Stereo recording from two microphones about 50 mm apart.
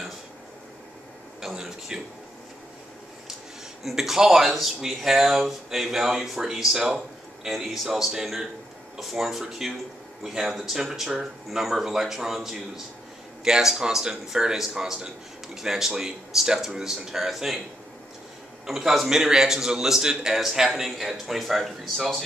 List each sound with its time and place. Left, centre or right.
1.4 s a sound: centre
3.8 s speech: centre
18.7 s speech: centre